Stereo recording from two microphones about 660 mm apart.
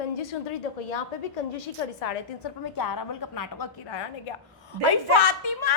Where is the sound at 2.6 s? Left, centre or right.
Left.